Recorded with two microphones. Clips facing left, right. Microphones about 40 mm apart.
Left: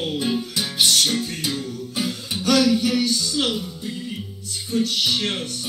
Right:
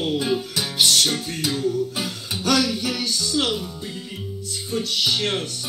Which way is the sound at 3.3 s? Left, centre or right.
Right.